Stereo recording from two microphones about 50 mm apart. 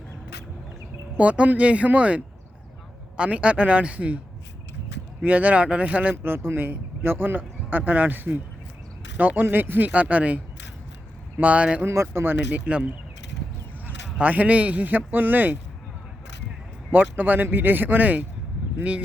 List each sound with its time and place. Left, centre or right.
1.1 s speech: right
5.2 s speech: right
6.2 s speech: right
9.9 s speech: right
11.9 s speech: right
12.5 s a man's voice: right
16.9 s speech: right